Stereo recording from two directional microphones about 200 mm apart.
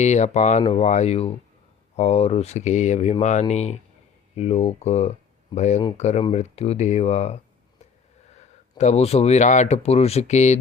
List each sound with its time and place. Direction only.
0.0 s speech: 35° left (ahead or behind)
8.8 s speech: 35° left (ahead or behind)